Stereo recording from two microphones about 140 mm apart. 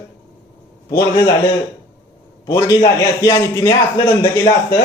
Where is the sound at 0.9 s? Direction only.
20° left (ahead or behind).